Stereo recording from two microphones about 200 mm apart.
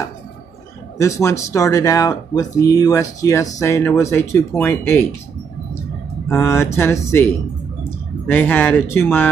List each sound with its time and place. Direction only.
0.9 s speech: 15° left (ahead or behind)
6.3 s speech: 15° left (ahead or behind)
8.3 s speech: 10° left (ahead or behind)